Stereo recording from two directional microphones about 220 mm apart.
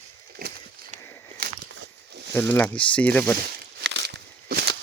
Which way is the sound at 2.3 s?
10° left (ahead or behind).